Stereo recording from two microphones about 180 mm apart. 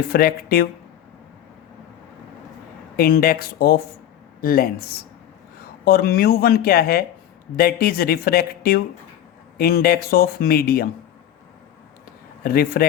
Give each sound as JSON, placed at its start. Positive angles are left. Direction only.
{"t": 0.1, "sound": "speech", "side_deg": 55}
{"t": 2.9, "sound": "speech", "side_deg": 55}
{"t": 12.4, "sound": "speech", "side_deg": 55}